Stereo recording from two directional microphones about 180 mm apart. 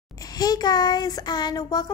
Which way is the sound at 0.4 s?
20° left (ahead or behind).